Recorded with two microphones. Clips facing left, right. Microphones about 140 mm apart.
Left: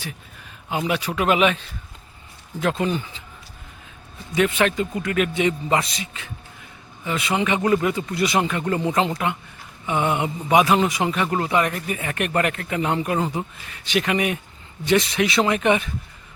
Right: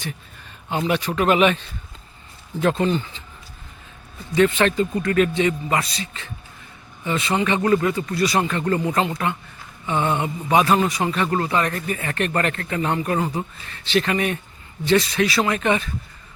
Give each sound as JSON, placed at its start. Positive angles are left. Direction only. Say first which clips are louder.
{"t": 0.7, "sound": "speech", "louder": "right 2 dB", "side_deg": 5}
{"t": 4.4, "sound": "speech", "louder": "right 2 dB", "side_deg": 10}
{"t": 7.0, "sound": "speech", "louder": "right 1 dB", "side_deg": 5}
{"t": 8.8, "sound": "speech", "louder": "even", "side_deg": 25}